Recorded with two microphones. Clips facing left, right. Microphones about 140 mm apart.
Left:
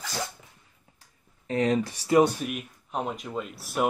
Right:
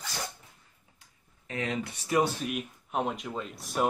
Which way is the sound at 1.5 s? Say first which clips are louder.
Left 8 dB; 35° left (ahead or behind).